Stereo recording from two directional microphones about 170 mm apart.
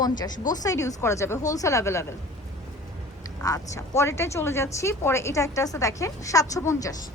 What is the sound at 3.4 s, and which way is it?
Speech, 20° left (ahead or behind).